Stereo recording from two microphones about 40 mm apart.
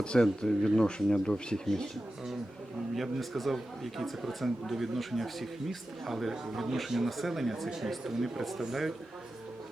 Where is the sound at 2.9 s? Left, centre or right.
Centre.